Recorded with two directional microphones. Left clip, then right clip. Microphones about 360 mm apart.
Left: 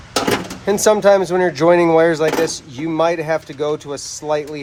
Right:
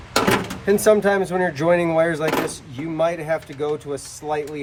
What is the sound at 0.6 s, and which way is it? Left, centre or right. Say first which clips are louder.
Speech: left 4 dB; centre.